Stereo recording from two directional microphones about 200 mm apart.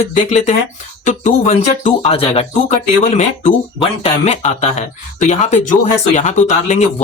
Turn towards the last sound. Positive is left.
turn(degrees=35)  # may be behind; listen again after turning